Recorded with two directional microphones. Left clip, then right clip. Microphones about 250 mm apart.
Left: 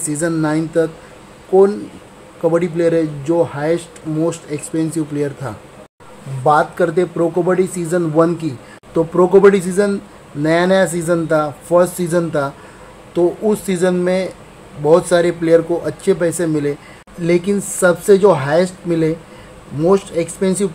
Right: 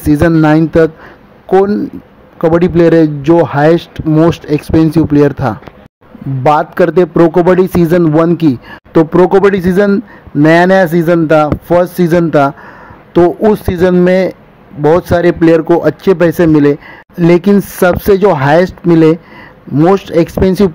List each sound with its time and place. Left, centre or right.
0.0 s a man's voice: right
2.5 s a man's voice: right
13.7 s a man's voice: right